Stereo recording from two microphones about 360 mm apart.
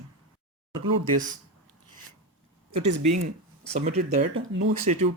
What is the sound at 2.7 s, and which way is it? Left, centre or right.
Speech, right.